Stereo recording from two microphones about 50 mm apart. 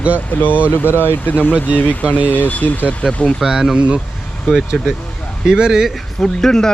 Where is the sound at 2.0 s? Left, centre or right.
Right.